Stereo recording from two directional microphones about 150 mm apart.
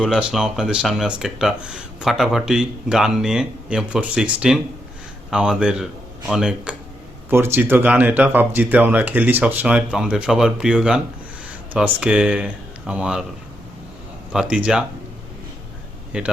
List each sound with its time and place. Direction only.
0.0 s speech: 5° right (ahead or behind)
7.3 s speech: 15° right (ahead or behind)
14.3 s speech: 5° right (ahead or behind)
16.1 s speech: 10° right (ahead or behind)